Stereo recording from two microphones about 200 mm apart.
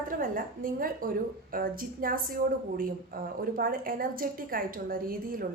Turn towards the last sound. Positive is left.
turn(degrees=-45)  # may be behind; listen again after turning